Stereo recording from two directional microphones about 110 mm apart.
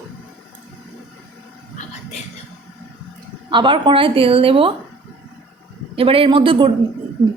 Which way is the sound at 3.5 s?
45° right (ahead or behind).